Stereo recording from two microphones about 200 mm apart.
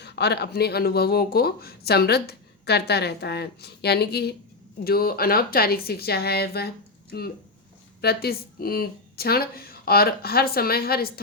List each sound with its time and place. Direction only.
0.0 s speech: 55° left (ahead or behind)
8.0 s speech: 50° left (ahead or behind)